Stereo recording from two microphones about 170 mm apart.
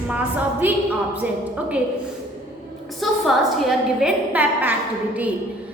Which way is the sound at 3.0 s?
Centre (ahead or behind).